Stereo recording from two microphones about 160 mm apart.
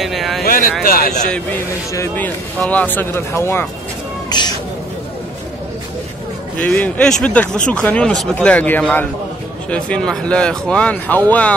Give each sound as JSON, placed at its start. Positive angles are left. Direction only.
{"t": 0.0, "sound": "vehicle", "side_deg": 0}
{"t": 0.5, "sound": "a sound", "side_deg": 60}
{"t": 0.8, "sound": "speech", "side_deg": 55}
{"t": 2.0, "sound": "speech", "side_deg": 10}
{"t": 4.3, "sound": "cat", "side_deg": 25}
{"t": 6.6, "sound": "speech", "side_deg": 5}